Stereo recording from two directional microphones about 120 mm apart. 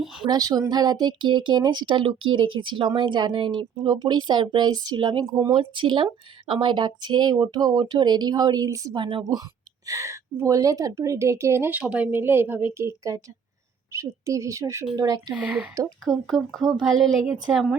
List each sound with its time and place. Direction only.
0.3 s a woman's voice: 30° right (ahead or behind)
15.3 s speech: 10° right (ahead or behind)
16.0 s a woman's voice: centre (ahead or behind)